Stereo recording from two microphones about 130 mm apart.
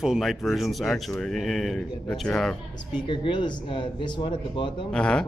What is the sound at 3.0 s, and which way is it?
Speech, 40° left (ahead or behind).